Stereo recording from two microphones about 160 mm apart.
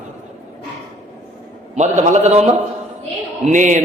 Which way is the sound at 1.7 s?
45° right (ahead or behind).